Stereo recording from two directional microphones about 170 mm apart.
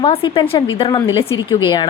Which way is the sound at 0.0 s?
30° left (ahead or behind).